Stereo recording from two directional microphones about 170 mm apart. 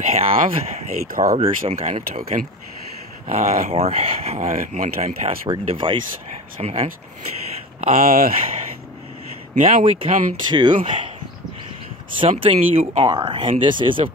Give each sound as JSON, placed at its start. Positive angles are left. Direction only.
{"t": 0.0, "sound": "speech", "side_deg": -40}
{"t": 4.6, "sound": "speech", "side_deg": -50}
{"t": 5.5, "sound": "speech", "side_deg": -30}
{"t": 8.0, "sound": "speech", "side_deg": -55}
{"t": 9.6, "sound": "speech", "side_deg": -45}
{"t": 10.5, "sound": "speech", "side_deg": -25}
{"t": 12.2, "sound": "speech", "side_deg": -35}